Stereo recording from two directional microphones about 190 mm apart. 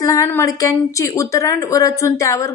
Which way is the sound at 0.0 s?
15° left (ahead or behind).